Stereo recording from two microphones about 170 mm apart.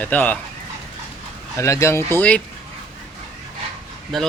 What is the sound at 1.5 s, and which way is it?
Speech, 15° left (ahead or behind).